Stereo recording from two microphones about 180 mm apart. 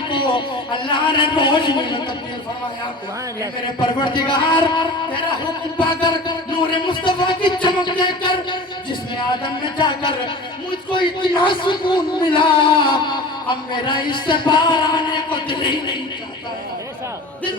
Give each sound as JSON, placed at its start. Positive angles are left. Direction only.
{"t": 0.1, "sound": "music", "side_deg": 25}
{"t": 3.8, "sound": "music", "side_deg": 25}
{"t": 5.9, "sound": "music", "side_deg": 25}
{"t": 11.2, "sound": "music", "side_deg": 25}